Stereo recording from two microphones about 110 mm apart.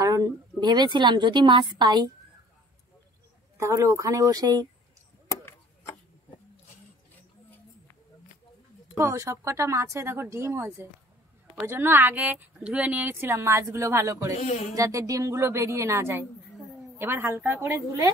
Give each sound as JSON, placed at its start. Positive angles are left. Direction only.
{"t": 0.0, "sound": "a woman's voice", "side_deg": -35}
{"t": 3.5, "sound": "speech", "side_deg": -25}
{"t": 8.9, "sound": "a woman's voice", "side_deg": -30}
{"t": 14.4, "sound": "speech", "side_deg": 90}
{"t": 14.8, "sound": "speech", "side_deg": -30}